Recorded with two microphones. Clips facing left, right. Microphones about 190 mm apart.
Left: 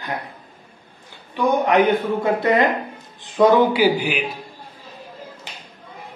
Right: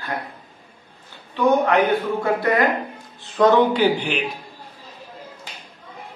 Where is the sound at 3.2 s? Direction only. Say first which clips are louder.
Left 1 dB; 10° left (ahead or behind).